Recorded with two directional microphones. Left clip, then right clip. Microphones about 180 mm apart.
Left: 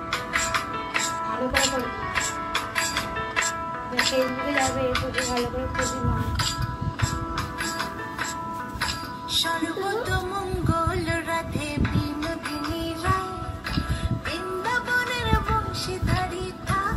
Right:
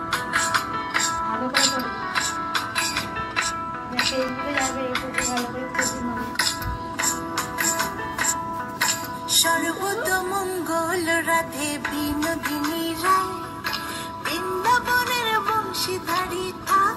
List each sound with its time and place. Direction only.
0.1 s music: centre (ahead or behind)
5.1 s music: 35° right (ahead or behind)
7.0 s music: 45° right (ahead or behind)